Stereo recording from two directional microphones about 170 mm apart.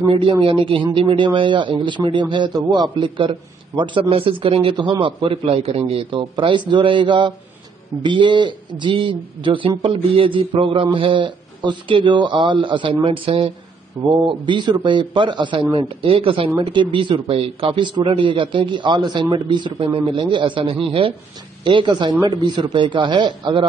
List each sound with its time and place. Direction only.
0.1 s a man's voice: 30° right (ahead or behind)